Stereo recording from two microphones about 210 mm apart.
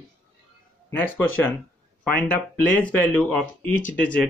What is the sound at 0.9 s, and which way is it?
Speech, 10° left (ahead or behind).